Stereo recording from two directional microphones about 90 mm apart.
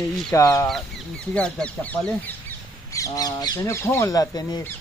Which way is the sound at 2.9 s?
40° left (ahead or behind).